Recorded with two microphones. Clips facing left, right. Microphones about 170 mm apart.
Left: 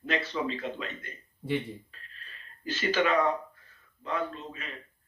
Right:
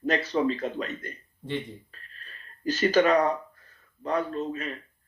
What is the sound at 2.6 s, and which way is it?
Speech, 40° right (ahead or behind).